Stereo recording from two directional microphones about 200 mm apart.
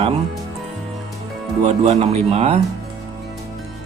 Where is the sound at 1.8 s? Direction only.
30° right (ahead or behind).